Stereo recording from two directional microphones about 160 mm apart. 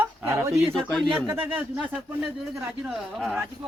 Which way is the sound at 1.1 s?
15° right (ahead or behind).